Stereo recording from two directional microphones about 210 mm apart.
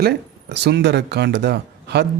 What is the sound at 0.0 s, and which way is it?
Speech, 55° right (ahead or behind).